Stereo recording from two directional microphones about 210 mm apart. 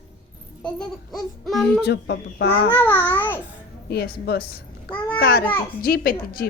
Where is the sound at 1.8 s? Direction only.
55° left (ahead or behind).